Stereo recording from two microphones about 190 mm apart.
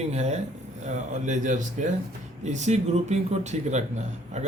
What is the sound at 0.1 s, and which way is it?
A man's voice, 35° right (ahead or behind).